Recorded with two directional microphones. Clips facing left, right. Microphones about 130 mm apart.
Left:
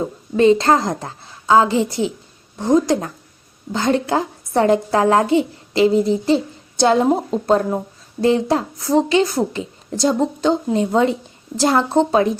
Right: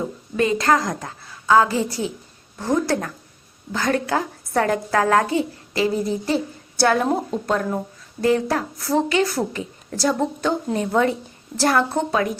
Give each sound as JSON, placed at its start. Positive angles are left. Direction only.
{"t": 0.3, "sound": "a woman's voice", "side_deg": 25}